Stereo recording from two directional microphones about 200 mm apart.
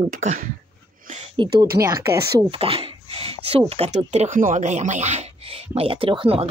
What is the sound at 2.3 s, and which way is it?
Speech, 25° right (ahead or behind).